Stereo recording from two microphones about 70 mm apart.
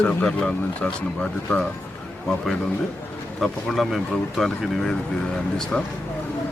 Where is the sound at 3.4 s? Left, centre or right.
Centre.